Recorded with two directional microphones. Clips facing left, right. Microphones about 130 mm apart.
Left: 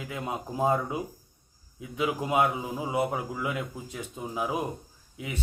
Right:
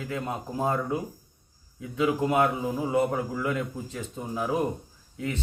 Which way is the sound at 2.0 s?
15° left (ahead or behind).